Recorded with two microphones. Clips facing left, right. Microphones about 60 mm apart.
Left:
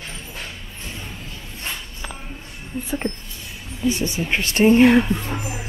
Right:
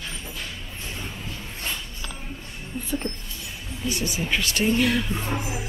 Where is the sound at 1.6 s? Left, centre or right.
Left.